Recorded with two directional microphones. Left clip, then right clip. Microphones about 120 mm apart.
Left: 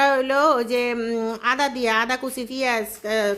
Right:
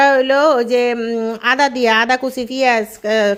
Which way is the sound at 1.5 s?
35° right (ahead or behind).